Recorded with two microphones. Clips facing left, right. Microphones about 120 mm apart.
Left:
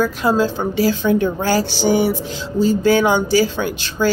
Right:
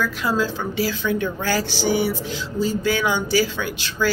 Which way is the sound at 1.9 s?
45° left (ahead or behind).